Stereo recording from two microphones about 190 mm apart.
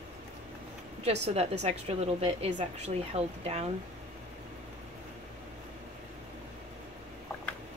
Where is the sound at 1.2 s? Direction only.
35° right (ahead or behind).